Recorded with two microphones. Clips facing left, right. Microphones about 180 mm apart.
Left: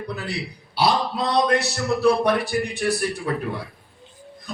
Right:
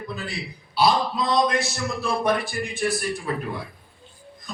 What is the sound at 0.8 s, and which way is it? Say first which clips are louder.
Speech: even; 65° left (ahead or behind).